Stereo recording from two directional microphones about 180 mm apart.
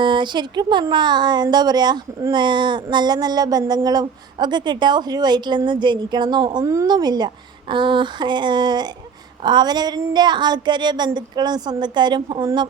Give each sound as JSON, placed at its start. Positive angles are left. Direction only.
{"t": 0.0, "sound": "speech", "side_deg": -25}